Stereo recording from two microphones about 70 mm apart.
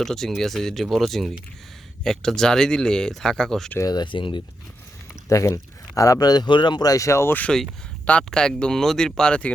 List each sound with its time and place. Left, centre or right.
0.0 s speech: centre
3.8 s speech: left
5.3 s speech: left
6.9 s speech: left
7.3 s speech: left